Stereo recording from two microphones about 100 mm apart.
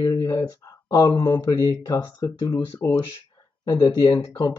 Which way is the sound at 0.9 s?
45° left (ahead or behind).